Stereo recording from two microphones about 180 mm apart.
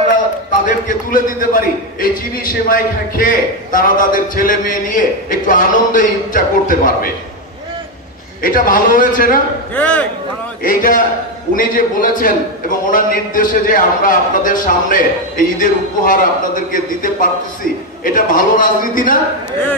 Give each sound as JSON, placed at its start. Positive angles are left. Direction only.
{"t": 0.7, "sound": "a man's voice", "side_deg": 50}
{"t": 8.4, "sound": "a man's voice", "side_deg": 50}
{"t": 9.8, "sound": "a man's voice", "side_deg": 5}
{"t": 10.6, "sound": "a man's voice", "side_deg": 50}